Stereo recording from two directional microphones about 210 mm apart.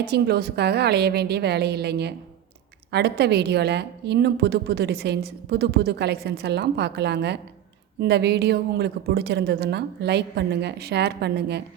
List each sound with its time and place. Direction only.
0.0 s a woman's voice: 50° right (ahead or behind)